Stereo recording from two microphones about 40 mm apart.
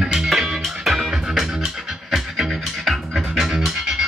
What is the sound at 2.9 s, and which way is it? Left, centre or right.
Music, centre.